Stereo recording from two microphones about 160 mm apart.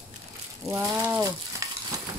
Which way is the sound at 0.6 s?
20° right (ahead or behind).